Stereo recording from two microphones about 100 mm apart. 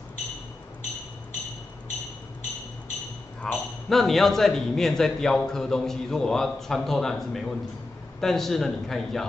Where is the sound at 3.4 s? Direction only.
5° left (ahead or behind).